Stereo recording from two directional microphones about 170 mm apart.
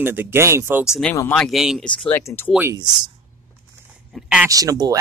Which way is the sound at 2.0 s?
15° left (ahead or behind).